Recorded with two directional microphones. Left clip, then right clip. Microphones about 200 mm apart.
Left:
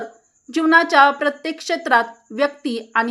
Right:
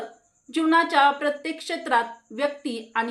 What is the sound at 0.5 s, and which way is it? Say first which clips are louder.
A woman's voice: left 6 dB; 45° left (ahead or behind).